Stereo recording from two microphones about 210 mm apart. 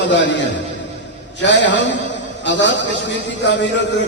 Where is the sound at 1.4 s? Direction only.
55° left (ahead or behind).